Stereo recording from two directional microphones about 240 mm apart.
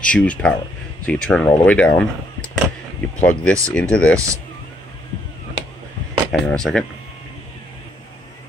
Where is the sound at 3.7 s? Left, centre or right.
Centre.